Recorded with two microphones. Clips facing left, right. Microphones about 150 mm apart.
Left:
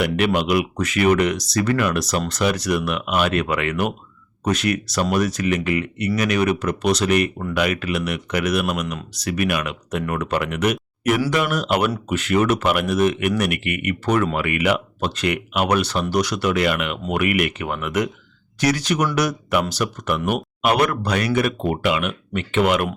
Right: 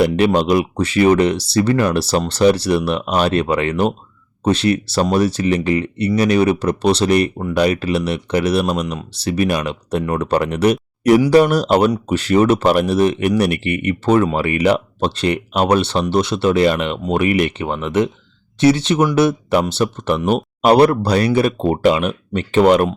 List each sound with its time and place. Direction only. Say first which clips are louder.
0.2 s speech: right 5 dB; 30° right (ahead or behind)